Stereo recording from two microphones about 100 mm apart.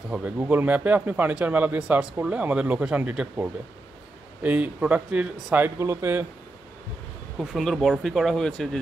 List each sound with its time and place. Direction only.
0.1 s speech: 15° right (ahead or behind)
5.8 s speech: 25° right (ahead or behind)
7.3 s speech: centre (ahead or behind)